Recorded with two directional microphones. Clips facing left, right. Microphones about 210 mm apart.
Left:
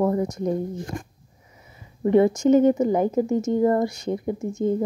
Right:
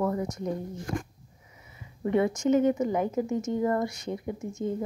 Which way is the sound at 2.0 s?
35° left (ahead or behind).